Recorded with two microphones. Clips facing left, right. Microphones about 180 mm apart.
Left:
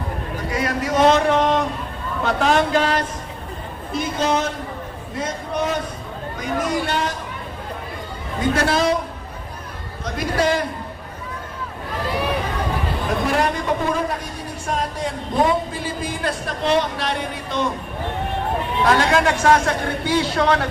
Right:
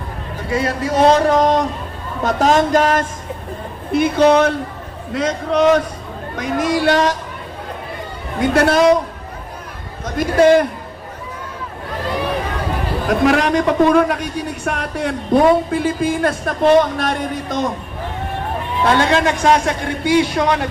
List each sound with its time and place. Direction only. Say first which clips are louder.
0.5 s a man's voice: right 3 dB; 30° right (ahead or behind); by 3.1 s 45° right (ahead or behind)
3.9 s a woman's voice: right 9 dB; 65° right (ahead or behind)
5.1 s a man's voice: right 8 dB; 90° right
8.4 s a woman's voice: right 6 dB; 60° right (ahead or behind)
10.2 s a woman's voice: right 9 dB; 50° right (ahead or behind)
13.2 s a man's voice: right 7 dB; 90° right; by 15.1 s 65° right (ahead or behind)
15.7 s a man's voice: right 9 dB; 55° right (ahead or behind)
18.9 s a man's voice: right 2 dB; 25° right (ahead or behind)